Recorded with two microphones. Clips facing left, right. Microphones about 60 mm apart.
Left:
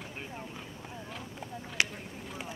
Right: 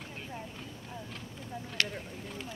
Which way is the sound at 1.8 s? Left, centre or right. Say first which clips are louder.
Left 2 dB; centre.